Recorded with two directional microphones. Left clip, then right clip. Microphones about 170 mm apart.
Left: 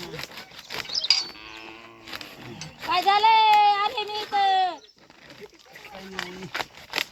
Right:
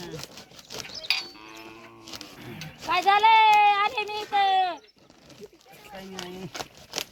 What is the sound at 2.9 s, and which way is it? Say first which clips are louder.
A child's voice: even; 10° right (ahead or behind).